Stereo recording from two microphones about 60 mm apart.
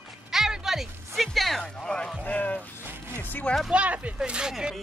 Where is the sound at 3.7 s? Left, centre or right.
Right.